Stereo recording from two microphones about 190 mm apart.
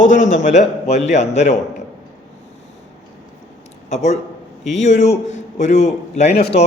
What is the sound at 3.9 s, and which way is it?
A man's voice, 35° left (ahead or behind).